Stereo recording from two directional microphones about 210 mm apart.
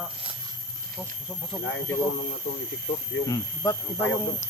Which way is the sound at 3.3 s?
15° left (ahead or behind).